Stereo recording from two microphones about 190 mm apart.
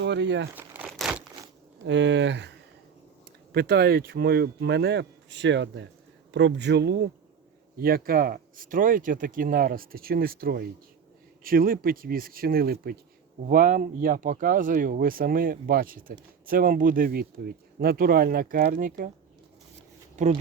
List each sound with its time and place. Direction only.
0.0 s speech: 65° right (ahead or behind)
0.5 s crumpling: 10° right (ahead or behind)
0.9 s a sound: centre (ahead or behind)
1.8 s speech: 70° right (ahead or behind)
3.5 s speech: 55° right (ahead or behind)
13.5 s speech: 45° right (ahead or behind)
20.2 s speech: 40° right (ahead or behind)